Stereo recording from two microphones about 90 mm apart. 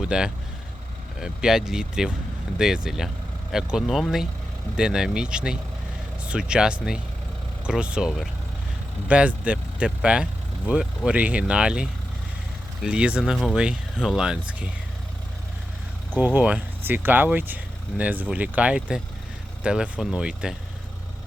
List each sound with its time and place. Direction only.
0.0 s speech: 10° right (ahead or behind)
13.3 s speech: centre (ahead or behind)
13.6 s speech: 10° right (ahead or behind)
16.1 s speech: 20° right (ahead or behind)